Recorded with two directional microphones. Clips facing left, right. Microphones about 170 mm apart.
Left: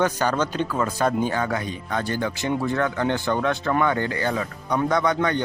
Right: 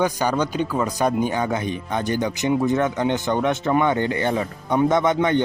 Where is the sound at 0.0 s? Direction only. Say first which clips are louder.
Right 1 dB; 10° right (ahead or behind).